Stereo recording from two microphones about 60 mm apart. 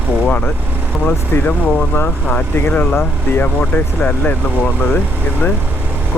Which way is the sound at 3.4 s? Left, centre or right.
Left.